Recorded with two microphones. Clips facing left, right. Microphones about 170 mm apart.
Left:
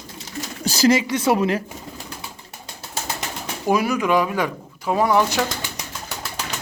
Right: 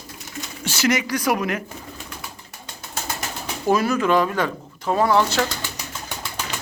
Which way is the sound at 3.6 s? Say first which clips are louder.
Even; 15° left (ahead or behind).